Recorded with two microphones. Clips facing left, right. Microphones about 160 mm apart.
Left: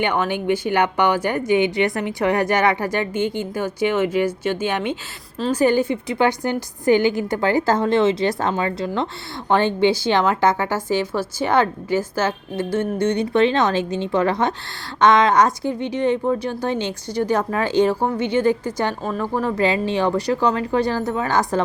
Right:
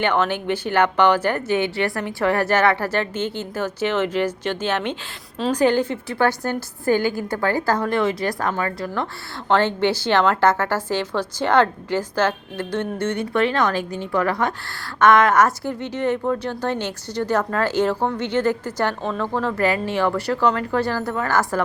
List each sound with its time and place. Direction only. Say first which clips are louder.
0.0 s a woman's voice: even; 10° left (ahead or behind)